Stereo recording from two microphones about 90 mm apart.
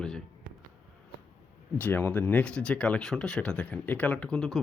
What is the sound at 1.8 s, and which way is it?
Speech, 20° left (ahead or behind).